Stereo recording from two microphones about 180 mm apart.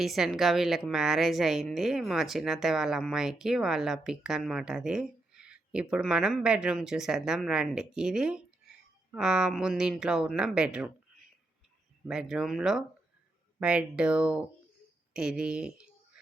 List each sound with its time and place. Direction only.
0.0 s a woman's voice: centre (ahead or behind)
12.0 s a woman's voice: 5° right (ahead or behind)